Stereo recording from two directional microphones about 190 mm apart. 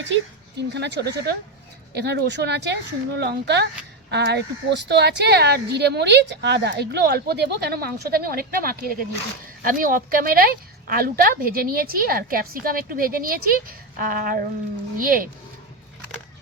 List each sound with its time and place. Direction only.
0.7 s a woman's voice: 65° right (ahead or behind); by 15.3 s 45° right (ahead or behind)